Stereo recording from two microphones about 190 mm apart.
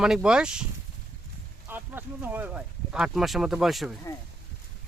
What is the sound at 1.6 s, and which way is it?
Speech, 10° right (ahead or behind).